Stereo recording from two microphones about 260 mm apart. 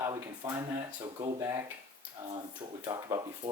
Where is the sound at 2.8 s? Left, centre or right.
Centre.